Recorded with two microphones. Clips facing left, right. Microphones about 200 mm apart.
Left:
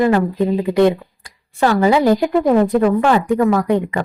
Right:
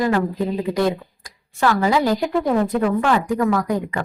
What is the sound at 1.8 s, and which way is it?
Speech, 25° left (ahead or behind).